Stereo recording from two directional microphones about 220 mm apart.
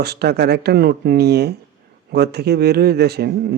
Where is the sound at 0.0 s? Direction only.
45° right (ahead or behind).